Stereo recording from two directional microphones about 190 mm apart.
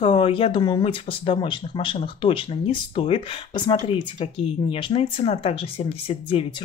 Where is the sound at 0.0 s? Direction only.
30° left (ahead or behind).